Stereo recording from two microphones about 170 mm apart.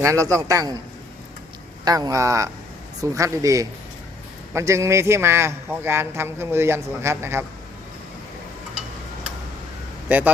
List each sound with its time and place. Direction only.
0.0 s a man's voice: 20° right (ahead or behind)
1.8 s a man's voice: 20° right (ahead or behind)
10.1 s speech: 10° right (ahead or behind)